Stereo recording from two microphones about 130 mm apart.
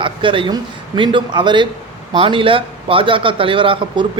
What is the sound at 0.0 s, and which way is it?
Speech, 40° right (ahead or behind).